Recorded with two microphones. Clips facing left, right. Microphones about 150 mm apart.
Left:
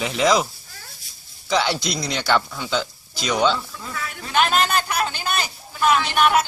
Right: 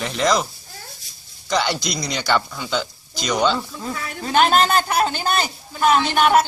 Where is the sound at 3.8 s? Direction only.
30° right (ahead or behind).